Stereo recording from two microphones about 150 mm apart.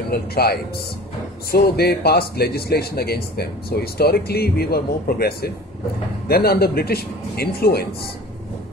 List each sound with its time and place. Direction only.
0.1 s a man's voice: 90° left